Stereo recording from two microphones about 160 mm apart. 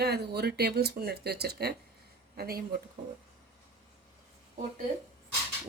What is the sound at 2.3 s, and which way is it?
Speech, 75° right (ahead or behind).